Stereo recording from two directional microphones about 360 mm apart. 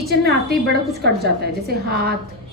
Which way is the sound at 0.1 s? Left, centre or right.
Right.